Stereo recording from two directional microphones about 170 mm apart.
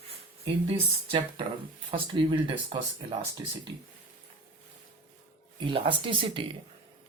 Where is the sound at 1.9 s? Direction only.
30° right (ahead or behind).